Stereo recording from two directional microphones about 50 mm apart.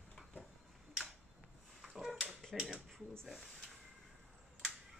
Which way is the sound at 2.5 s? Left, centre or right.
Centre.